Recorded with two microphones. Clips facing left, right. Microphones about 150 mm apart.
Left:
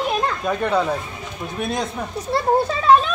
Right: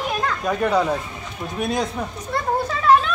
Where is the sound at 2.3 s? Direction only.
30° left (ahead or behind).